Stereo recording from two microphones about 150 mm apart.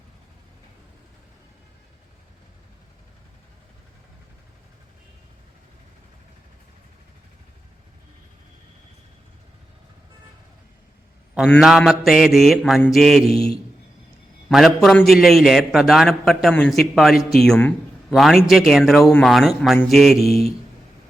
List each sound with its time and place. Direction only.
11.6 s a man's voice: centre (ahead or behind)
13.3 s a man's voice: 40° right (ahead or behind)
14.5 s a man's voice: centre (ahead or behind)